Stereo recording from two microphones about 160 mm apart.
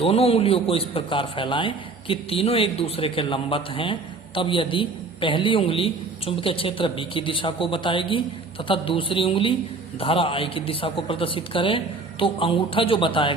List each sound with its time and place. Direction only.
0.0 s a man's voice: 40° left (ahead or behind)